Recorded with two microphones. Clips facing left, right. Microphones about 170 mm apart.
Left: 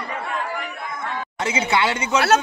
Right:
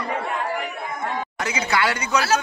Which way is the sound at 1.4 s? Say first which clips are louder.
Left 3 dB; 25° left (ahead or behind).